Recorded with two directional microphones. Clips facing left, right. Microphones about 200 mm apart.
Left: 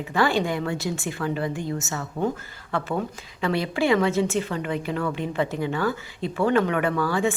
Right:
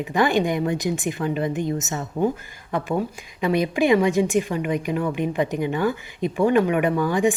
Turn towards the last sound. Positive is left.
turn(degrees=-15)  # may be behind; listen again after turning